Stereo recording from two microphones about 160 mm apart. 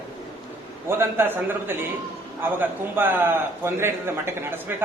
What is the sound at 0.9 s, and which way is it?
A man's voice, 15° right (ahead or behind).